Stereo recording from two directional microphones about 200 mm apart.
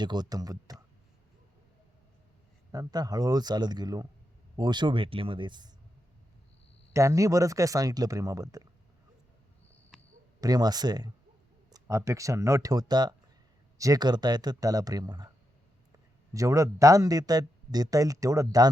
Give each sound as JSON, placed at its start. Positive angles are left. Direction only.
{"t": 0.0, "sound": "speech", "side_deg": -20}
{"t": 2.7, "sound": "speech", "side_deg": -20}
{"t": 6.9, "sound": "speech", "side_deg": -15}
{"t": 10.4, "sound": "speech", "side_deg": -20}